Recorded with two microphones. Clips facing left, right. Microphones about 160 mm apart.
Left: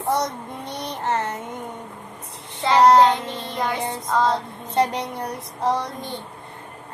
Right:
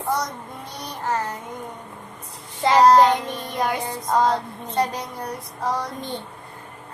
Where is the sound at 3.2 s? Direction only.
15° right (ahead or behind).